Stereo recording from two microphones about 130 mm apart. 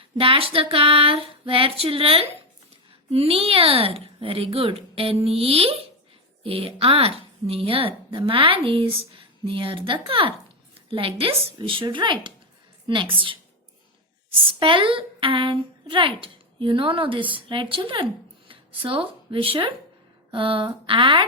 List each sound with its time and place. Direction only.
0.2 s a woman's voice: 45° right (ahead or behind)
14.6 s speech: 40° right (ahead or behind)